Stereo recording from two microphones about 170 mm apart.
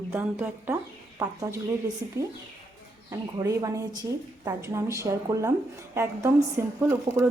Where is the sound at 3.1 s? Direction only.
20° right (ahead or behind).